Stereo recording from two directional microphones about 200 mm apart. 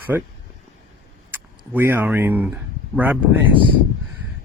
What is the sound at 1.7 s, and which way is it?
Speech, 10° right (ahead or behind).